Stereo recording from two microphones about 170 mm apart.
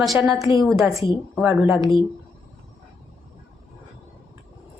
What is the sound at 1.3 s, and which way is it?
Speech, centre (ahead or behind).